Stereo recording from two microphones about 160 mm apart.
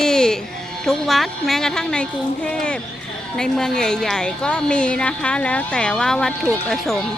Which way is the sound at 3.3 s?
5° left (ahead or behind).